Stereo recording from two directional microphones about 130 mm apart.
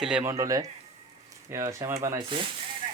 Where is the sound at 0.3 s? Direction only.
25° right (ahead or behind).